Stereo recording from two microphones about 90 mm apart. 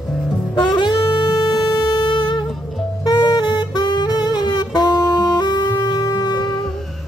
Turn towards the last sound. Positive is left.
turn(degrees=35)  # may be behind; listen again after turning